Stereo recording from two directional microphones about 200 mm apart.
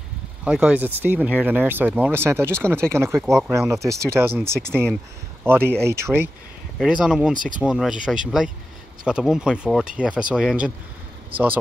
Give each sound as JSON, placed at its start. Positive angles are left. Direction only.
{"t": 0.5, "sound": "speech", "side_deg": -5}
{"t": 3.2, "sound": "speech", "side_deg": 0}
{"t": 3.5, "sound": "speech", "side_deg": -15}